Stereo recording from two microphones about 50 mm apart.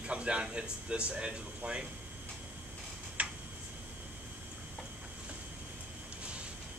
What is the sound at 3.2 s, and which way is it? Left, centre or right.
Tick-tock, right.